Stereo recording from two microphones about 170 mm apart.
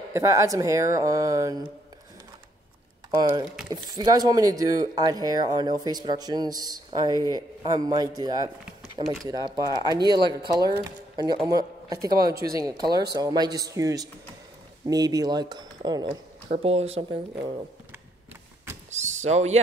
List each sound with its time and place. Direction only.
0.1 s speech: 15° right (ahead or behind)
3.1 s speech: 25° right (ahead or behind)
16.1 s speech: 40° right (ahead or behind)
19.0 s speech: 40° right (ahead or behind)